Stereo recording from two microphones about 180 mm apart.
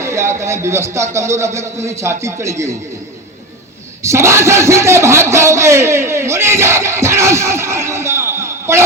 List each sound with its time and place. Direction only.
0.0 s speech: 15° right (ahead or behind)
4.0 s a man's voice: 15° right (ahead or behind)